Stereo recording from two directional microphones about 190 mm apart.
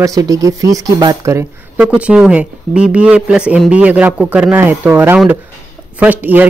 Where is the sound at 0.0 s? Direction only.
20° right (ahead or behind).